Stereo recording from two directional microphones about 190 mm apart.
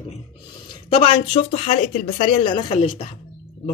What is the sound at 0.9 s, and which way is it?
Speech, 30° left (ahead or behind).